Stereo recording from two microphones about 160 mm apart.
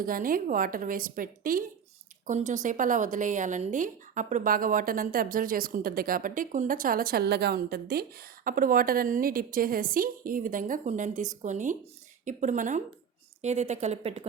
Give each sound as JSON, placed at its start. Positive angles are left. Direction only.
{"t": 0.0, "sound": "a woman's voice", "side_deg": -60}